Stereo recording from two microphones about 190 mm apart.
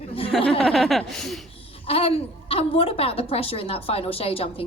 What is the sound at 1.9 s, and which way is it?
A woman's voice, 30° left (ahead or behind).